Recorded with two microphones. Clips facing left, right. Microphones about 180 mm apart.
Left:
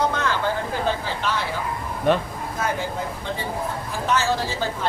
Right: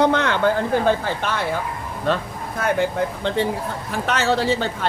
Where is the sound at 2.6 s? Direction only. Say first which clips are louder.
Right 6 dB; 65° right (ahead or behind).